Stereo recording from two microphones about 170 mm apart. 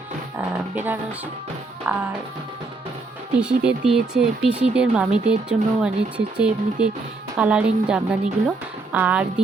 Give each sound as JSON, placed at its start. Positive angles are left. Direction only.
{"t": 0.3, "sound": "music", "side_deg": -10}
{"t": 1.9, "sound": "a woman's voice", "side_deg": -10}
{"t": 3.3, "sound": "speech", "side_deg": -5}
{"t": 5.1, "sound": "speech", "side_deg": -40}
{"t": 5.5, "sound": "a woman's voice", "side_deg": -5}